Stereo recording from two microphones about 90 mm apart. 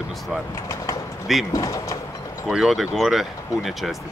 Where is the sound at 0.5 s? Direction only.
35° left (ahead or behind).